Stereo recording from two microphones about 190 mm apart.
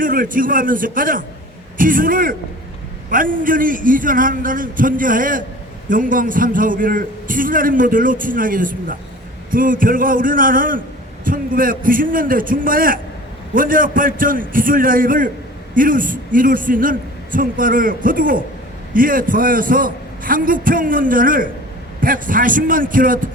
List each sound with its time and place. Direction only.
0.0 s a man's voice: 45° right (ahead or behind)